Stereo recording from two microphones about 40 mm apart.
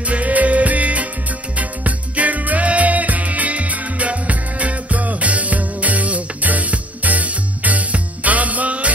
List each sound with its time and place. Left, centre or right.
0.1 s music: right